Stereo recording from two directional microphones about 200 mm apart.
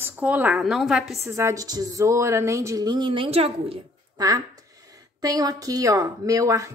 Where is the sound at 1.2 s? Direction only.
15° right (ahead or behind).